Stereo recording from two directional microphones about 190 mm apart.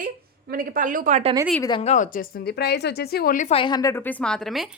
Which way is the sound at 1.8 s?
40° left (ahead or behind).